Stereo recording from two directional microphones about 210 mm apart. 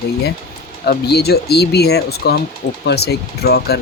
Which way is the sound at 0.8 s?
50° left (ahead or behind).